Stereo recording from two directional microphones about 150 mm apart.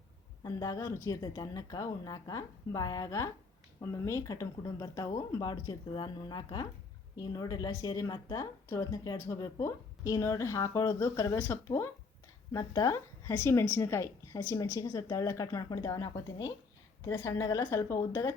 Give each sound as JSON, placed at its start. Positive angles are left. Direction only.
{"t": 0.4, "sound": "a woman's voice", "side_deg": 20}